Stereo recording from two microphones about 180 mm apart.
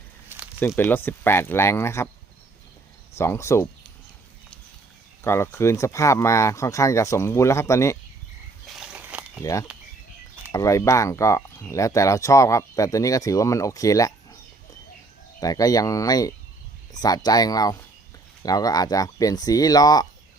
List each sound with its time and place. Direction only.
0.3 s a sound: 10° right (ahead or behind)
0.8 s speech: 10° left (ahead or behind)
3.2 s speech: 15° left (ahead or behind)
5.2 s speech: 15° left (ahead or behind)
8.6 s a sound: 5° right (ahead or behind)
9.4 s speech: 20° left (ahead or behind)
15.4 s speech: 20° left (ahead or behind)